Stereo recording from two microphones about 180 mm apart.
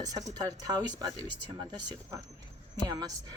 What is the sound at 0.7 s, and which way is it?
Speech, 25° right (ahead or behind).